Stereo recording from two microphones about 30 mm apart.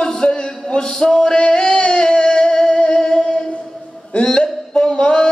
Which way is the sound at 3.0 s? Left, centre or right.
Left.